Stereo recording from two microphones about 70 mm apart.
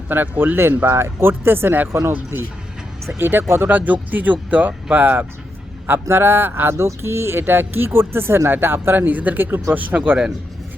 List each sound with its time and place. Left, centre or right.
0.1 s speech: right
3.2 s speech: right